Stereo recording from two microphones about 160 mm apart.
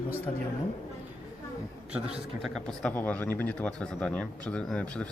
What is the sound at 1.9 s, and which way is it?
A man's voice, 5° right (ahead or behind).